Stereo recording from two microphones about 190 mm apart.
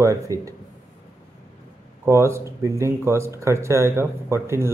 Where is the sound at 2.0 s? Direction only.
15° right (ahead or behind).